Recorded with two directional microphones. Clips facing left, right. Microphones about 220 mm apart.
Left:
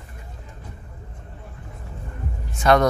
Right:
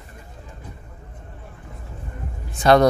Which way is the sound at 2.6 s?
30° right (ahead or behind).